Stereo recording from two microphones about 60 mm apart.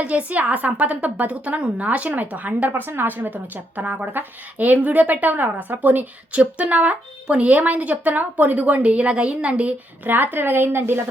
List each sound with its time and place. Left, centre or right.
0.0 s a woman's voice: right
10.3 s speech: right